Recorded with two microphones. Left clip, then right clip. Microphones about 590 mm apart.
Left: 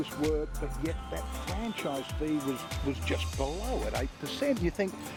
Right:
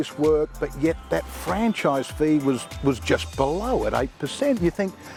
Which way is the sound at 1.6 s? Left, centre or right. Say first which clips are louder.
Right 13 dB; right.